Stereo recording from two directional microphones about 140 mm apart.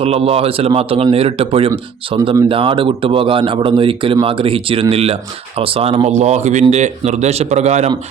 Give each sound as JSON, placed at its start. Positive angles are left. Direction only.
{"t": 0.0, "sound": "a man's voice", "side_deg": -45}